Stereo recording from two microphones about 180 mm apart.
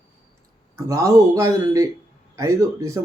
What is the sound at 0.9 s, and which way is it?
Speech, 20° right (ahead or behind).